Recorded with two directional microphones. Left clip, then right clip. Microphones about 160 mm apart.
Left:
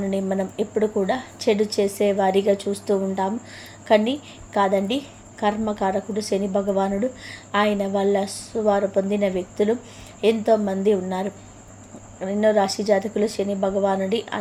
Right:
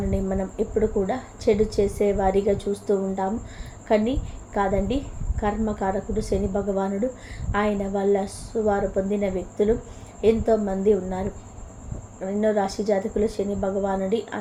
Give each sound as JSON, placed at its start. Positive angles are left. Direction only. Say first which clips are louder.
{"t": 0.1, "sound": "a woman's voice", "louder": "left 3 dB", "side_deg": 20}